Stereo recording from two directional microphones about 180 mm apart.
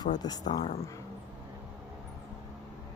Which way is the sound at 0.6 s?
30° left (ahead or behind).